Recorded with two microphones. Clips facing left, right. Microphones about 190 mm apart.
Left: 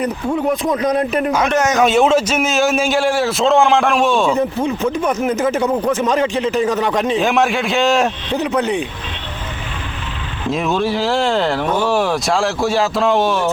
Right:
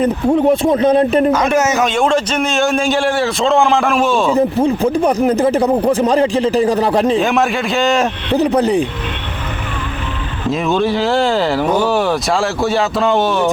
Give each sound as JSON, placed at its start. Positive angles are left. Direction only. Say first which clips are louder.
{"t": 0.3, "sound": "speech", "louder": "right 6 dB", "side_deg": -35}
{"t": 1.5, "sound": "a man's voice", "louder": "right 2 dB", "side_deg": -5}
{"t": 1.8, "sound": "a man's voice", "louder": "left 2 dB", "side_deg": 5}
{"t": 4.4, "sound": "speech", "louder": "right 5 dB", "side_deg": -35}
{"t": 7.2, "sound": "a man's voice", "louder": "right 1 dB", "side_deg": 0}
{"t": 8.4, "sound": "speech", "louder": "right 5 dB", "side_deg": -35}
{"t": 10.5, "sound": "a man's voice", "louder": "right 2 dB", "side_deg": 0}